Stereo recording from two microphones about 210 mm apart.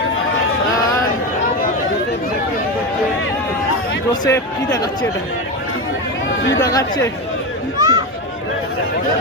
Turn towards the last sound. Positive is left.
turn(degrees=-15)  # may be behind; listen again after turning